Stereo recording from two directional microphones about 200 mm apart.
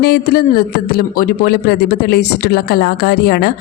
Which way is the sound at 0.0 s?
50° left (ahead or behind).